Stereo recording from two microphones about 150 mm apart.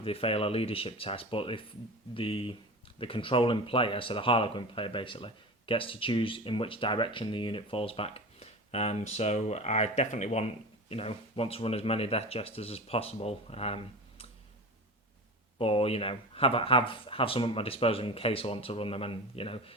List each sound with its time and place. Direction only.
0.0 s speech: 40° left (ahead or behind)
15.5 s speech: 40° left (ahead or behind)